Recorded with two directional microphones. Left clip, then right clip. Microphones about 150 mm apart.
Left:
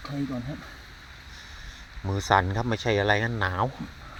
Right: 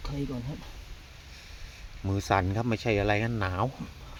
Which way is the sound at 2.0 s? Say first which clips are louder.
Left 4 dB; 25° right (ahead or behind).